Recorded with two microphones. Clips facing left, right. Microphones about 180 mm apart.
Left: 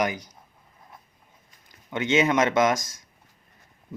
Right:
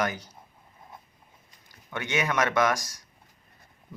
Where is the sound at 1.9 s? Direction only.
20° left (ahead or behind).